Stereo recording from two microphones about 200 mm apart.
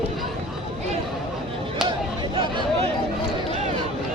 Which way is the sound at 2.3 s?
25° right (ahead or behind).